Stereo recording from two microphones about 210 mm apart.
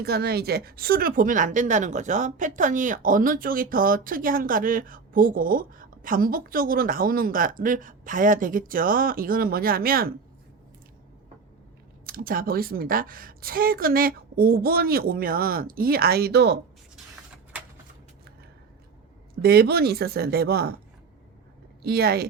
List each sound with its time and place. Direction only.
0.0 s a woman's voice: 50° right (ahead or behind)
12.0 s a woman's voice: 45° right (ahead or behind)
19.4 s a woman's voice: 45° right (ahead or behind)
21.8 s a woman's voice: 50° right (ahead or behind)